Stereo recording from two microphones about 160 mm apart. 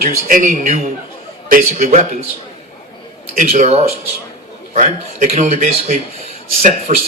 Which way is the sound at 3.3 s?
50° right (ahead or behind).